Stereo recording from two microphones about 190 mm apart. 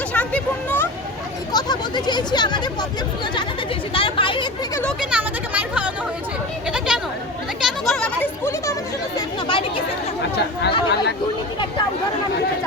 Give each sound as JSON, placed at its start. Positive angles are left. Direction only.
{"t": 0.1, "sound": "a sound", "side_deg": 10}
{"t": 1.5, "sound": "speech", "side_deg": 20}
{"t": 3.9, "sound": "speech", "side_deg": 25}
{"t": 4.7, "sound": "speech", "side_deg": 10}
{"t": 4.9, "sound": "speech", "side_deg": -5}
{"t": 6.7, "sound": "chatter", "side_deg": -5}
{"t": 7.6, "sound": "a sound", "side_deg": 0}
{"t": 9.1, "sound": "chatter", "side_deg": 25}